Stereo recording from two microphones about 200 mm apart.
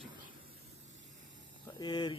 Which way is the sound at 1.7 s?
25° left (ahead or behind).